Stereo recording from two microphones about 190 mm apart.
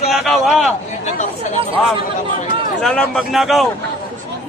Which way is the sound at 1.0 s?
35° left (ahead or behind).